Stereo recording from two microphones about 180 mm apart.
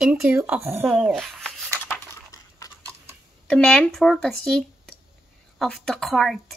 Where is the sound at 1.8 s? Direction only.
15° left (ahead or behind).